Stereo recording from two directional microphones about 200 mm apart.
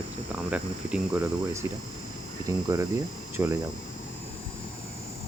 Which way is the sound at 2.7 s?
15° right (ahead or behind).